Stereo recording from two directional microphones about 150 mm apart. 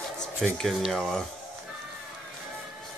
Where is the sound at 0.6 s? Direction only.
Centre (ahead or behind).